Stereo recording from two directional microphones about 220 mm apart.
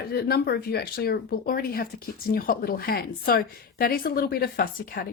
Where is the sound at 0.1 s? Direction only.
45° left (ahead or behind).